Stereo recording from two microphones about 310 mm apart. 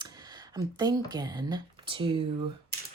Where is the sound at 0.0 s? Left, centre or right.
Centre.